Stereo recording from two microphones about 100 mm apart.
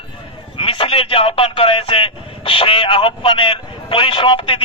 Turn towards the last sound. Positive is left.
turn(degrees=60)  # may be behind; listen again after turning